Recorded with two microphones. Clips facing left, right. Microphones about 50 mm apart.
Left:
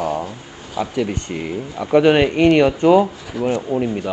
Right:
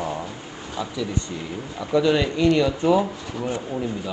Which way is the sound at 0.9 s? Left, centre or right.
Left.